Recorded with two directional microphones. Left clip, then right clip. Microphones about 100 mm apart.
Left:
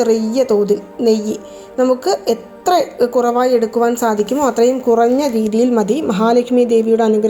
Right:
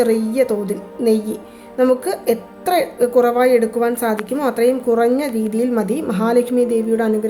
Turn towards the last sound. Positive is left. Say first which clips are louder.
# left 5 dB
turn(degrees=25)  # may be behind; listen again after turning